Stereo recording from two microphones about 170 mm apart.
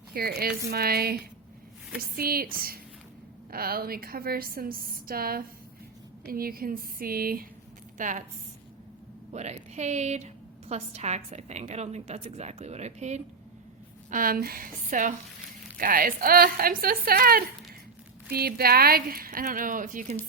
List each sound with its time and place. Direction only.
0.1 s a woman's voice: 65° right (ahead or behind)
7.9 s a woman's voice: 50° right (ahead or behind)
9.3 s a woman's voice: 40° right (ahead or behind)
14.1 s a woman's voice: 55° right (ahead or behind)